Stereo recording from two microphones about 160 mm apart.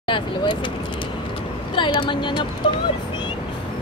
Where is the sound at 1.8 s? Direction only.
30° left (ahead or behind).